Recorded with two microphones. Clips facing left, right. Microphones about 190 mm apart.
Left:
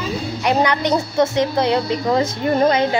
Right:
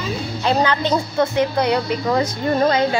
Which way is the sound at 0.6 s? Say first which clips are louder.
Left 1 dB; 15° left (ahead or behind).